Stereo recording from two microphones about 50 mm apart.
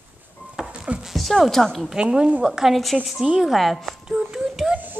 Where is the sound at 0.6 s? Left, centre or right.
Right.